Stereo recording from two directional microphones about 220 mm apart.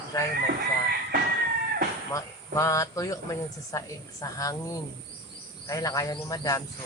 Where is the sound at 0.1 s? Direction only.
15° left (ahead or behind).